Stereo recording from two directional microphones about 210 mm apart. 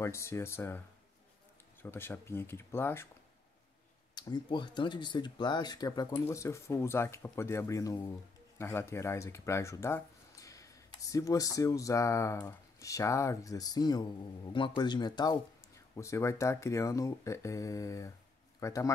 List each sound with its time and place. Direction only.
0.0 s speech: 15° left (ahead or behind)
4.1 s speech: 20° left (ahead or behind)